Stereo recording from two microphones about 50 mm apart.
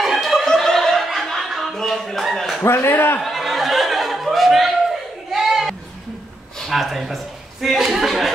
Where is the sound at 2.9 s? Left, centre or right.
Left.